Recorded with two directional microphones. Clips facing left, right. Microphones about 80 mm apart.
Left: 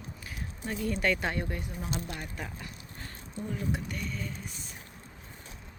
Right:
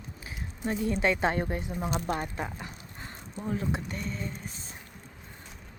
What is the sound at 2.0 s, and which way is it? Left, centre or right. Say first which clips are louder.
Speech: right 7 dB; right.